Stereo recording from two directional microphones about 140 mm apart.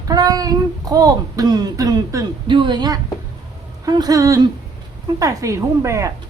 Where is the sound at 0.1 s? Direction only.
25° right (ahead or behind).